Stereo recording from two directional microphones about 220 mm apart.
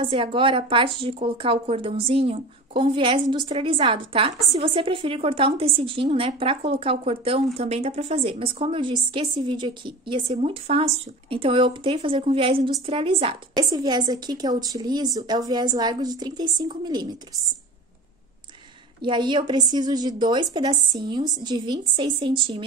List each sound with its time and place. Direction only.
0.0 s a woman's voice: 25° right (ahead or behind)
18.9 s a woman's voice: 20° right (ahead or behind)